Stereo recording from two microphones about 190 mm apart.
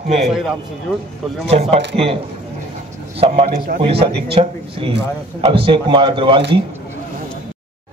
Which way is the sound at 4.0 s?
30° right (ahead or behind).